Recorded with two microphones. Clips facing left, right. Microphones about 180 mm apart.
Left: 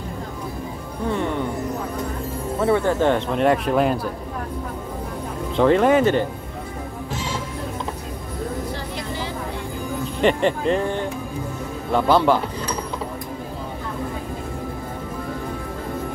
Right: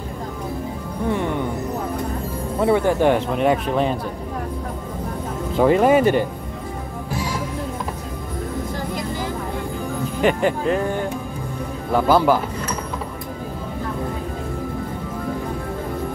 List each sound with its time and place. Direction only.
2.6 s speech: 15° right (ahead or behind); by 4.0 s 5° left (ahead or behind)
5.6 s speech: 10° right (ahead or behind)
7.2 s music: 25° left (ahead or behind)
10.2 s speech: 5° right (ahead or behind)